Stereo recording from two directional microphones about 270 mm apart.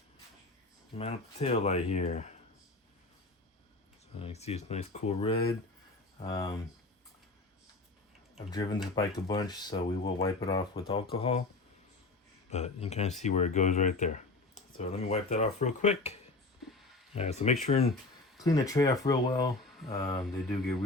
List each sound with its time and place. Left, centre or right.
0.9 s speech: left
4.2 s speech: left
8.4 s speech: centre
12.5 s speech: left
17.2 s speech: left
18.4 s speech: centre